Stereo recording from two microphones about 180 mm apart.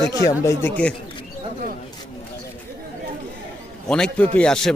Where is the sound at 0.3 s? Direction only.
15° left (ahead or behind).